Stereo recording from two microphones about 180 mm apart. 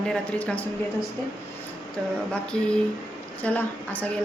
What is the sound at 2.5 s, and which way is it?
A woman's voice, 5° left (ahead or behind).